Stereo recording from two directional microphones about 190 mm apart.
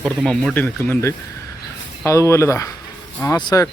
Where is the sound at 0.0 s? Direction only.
5° left (ahead or behind).